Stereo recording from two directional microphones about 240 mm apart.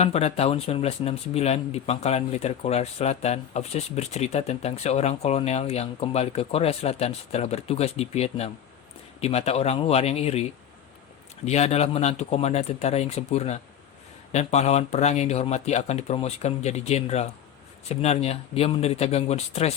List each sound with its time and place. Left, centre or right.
0.0 s speech: left
11.4 s speech: left